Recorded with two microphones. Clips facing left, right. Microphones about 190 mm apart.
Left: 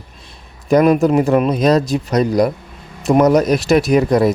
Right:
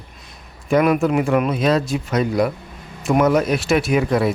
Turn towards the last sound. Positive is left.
turn(degrees=40)  # may be behind; listen again after turning